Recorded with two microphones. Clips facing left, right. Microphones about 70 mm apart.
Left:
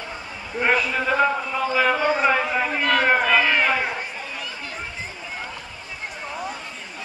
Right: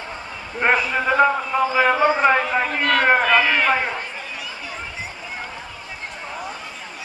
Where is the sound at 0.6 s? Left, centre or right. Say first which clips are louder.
Right 2 dB; centre.